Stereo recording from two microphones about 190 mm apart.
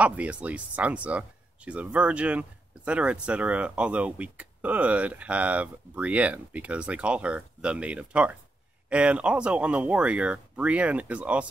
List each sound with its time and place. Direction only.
0.0 s speech: 5° right (ahead or behind)